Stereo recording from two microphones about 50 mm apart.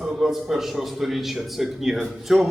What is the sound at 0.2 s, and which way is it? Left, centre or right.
A man's voice, centre.